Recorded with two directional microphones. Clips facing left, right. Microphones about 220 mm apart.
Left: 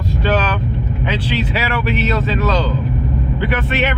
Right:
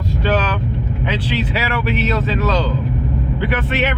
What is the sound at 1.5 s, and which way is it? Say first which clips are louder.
Speech: left 1 dB; 10° right (ahead or behind).